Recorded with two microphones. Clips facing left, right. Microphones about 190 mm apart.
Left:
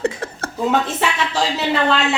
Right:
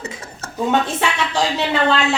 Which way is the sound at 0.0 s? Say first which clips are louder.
Left 9 dB; 55° left (ahead or behind).